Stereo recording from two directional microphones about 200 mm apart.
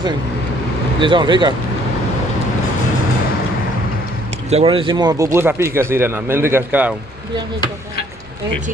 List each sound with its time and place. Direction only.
1.0 s speech: 25° right (ahead or behind)
4.5 s speech: 30° right (ahead or behind); by 6.9 s 10° right (ahead or behind)